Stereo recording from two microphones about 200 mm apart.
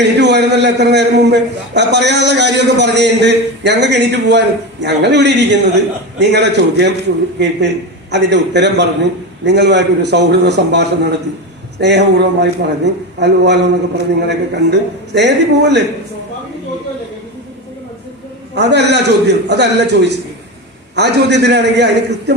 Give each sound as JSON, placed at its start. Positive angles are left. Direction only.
{"t": 0.0, "sound": "a man's voice", "side_deg": -55}
{"t": 18.5, "sound": "a man's voice", "side_deg": -55}